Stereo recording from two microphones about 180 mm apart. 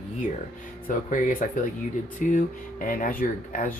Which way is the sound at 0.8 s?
50° left (ahead or behind).